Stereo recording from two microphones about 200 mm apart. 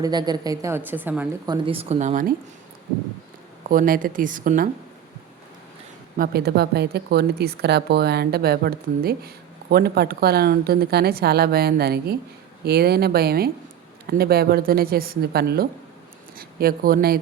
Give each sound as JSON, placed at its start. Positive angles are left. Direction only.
{"t": 0.0, "sound": "a woman's voice", "side_deg": -20}
{"t": 1.5, "sound": "speech", "side_deg": -30}
{"t": 3.7, "sound": "speech", "side_deg": -45}
{"t": 6.1, "sound": "speech", "side_deg": -50}